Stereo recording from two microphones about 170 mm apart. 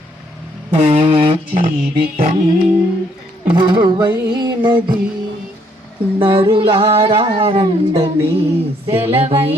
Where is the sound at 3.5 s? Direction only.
25° right (ahead or behind).